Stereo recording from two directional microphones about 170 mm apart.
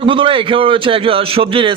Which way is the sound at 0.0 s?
30° right (ahead or behind).